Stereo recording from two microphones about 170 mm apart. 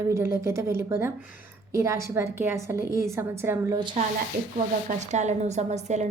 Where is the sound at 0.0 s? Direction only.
15° right (ahead or behind).